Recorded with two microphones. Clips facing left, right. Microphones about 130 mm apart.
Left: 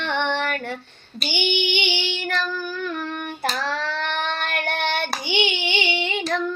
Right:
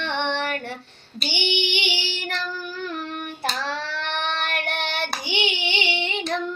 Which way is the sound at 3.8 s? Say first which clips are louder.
Left 3 dB; 55° left (ahead or behind).